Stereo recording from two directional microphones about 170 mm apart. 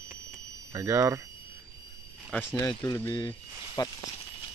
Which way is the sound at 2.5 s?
20° left (ahead or behind).